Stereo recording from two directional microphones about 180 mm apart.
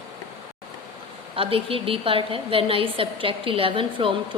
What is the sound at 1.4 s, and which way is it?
A woman's voice, 30° right (ahead or behind).